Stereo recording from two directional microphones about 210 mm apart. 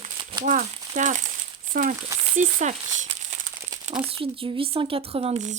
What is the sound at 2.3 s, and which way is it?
Speech, 35° right (ahead or behind).